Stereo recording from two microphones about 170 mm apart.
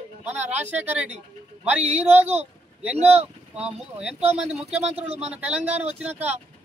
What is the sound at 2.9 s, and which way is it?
Speech, 40° right (ahead or behind).